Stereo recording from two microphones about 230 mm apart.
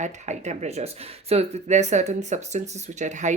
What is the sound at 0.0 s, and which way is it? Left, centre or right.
Speech, right.